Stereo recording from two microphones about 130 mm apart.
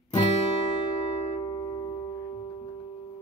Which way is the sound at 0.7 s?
40° left (ahead or behind).